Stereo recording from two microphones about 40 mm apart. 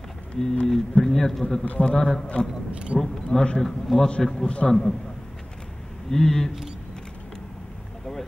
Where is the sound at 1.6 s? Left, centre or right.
Left.